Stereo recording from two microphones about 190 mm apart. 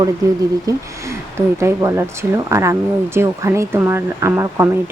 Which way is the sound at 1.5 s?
15° right (ahead or behind).